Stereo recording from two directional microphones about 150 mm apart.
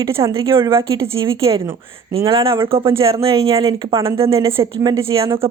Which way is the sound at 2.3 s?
35° right (ahead or behind).